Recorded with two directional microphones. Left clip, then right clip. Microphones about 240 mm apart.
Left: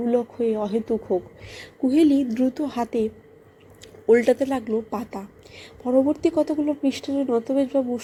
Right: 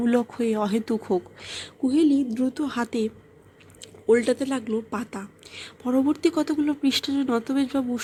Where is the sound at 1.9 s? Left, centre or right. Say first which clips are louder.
Left 2 dB; centre.